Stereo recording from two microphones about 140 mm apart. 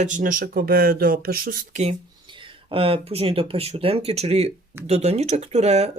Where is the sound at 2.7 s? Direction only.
40° right (ahead or behind).